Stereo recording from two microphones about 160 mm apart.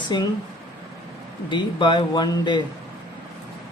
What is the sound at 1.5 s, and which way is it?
Speech, 30° left (ahead or behind).